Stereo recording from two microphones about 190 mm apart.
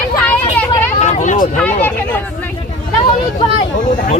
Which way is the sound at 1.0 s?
40° left (ahead or behind).